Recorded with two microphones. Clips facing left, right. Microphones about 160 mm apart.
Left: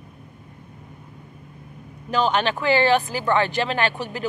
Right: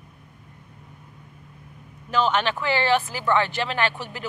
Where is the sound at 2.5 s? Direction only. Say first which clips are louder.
Left 3 dB; 45° left (ahead or behind).